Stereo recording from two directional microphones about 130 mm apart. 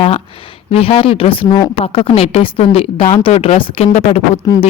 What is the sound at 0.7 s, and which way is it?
Speech, 45° left (ahead or behind).